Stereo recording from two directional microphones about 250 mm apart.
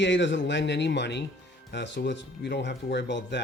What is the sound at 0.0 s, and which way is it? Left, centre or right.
Speech, left.